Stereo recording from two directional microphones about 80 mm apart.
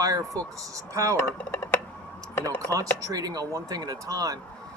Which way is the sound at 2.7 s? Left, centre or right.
Right.